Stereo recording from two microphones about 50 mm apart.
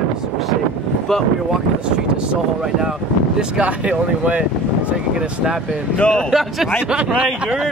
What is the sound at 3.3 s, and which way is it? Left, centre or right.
Speech, right.